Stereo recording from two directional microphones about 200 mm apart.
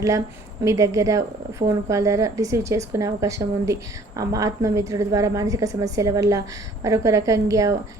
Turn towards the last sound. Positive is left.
turn(degrees=-15)  # may be behind; listen again after turning